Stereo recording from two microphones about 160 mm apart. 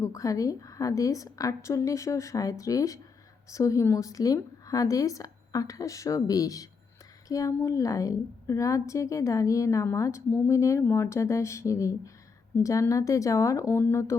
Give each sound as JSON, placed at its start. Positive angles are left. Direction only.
{"t": 0.0, "sound": "a woman's voice", "side_deg": 20}